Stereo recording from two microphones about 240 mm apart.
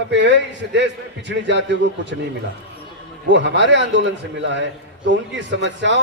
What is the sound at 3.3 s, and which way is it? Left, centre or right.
A man's voice, right.